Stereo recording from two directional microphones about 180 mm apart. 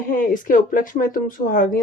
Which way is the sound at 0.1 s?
50° left (ahead or behind).